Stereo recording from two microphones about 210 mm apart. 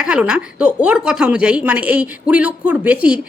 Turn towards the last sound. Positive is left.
turn(degrees=-5)  # may be behind; listen again after turning